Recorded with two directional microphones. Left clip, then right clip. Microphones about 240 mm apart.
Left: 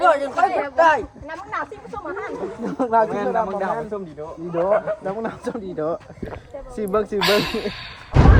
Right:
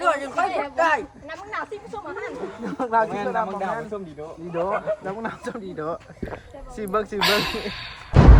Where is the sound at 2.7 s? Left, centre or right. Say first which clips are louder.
Left 3 dB; left.